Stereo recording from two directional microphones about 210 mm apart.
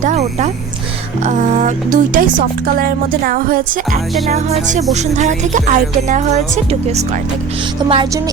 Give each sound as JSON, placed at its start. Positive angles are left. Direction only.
{"t": 0.0, "sound": "music", "side_deg": -35}
{"t": 4.3, "sound": "music", "side_deg": -30}